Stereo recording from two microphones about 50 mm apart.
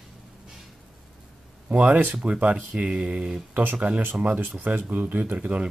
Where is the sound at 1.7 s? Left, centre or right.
Right.